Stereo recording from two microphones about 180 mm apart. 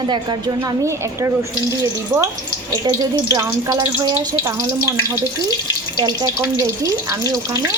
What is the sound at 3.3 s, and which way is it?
Speech, 20° right (ahead or behind).